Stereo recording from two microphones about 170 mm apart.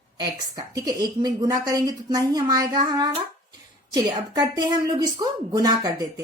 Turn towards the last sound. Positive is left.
turn(degrees=-20)  # may be behind; listen again after turning